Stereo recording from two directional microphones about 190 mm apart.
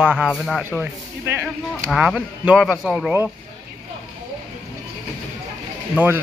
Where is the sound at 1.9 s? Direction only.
5° right (ahead or behind).